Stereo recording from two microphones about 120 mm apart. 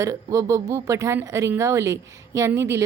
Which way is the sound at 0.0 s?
30° right (ahead or behind).